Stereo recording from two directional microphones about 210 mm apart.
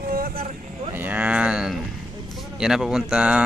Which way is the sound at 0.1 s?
45° right (ahead or behind).